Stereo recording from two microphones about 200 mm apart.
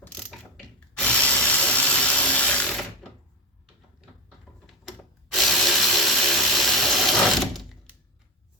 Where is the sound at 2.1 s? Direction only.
5° left (ahead or behind).